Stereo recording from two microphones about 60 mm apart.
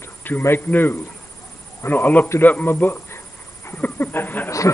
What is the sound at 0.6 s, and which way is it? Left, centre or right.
Speech, left.